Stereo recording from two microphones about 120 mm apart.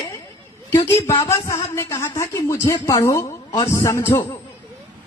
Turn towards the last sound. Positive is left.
turn(degrees=20)  # may be behind; listen again after turning